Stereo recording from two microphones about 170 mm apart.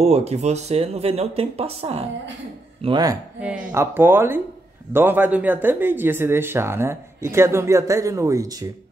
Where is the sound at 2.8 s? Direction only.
25° right (ahead or behind).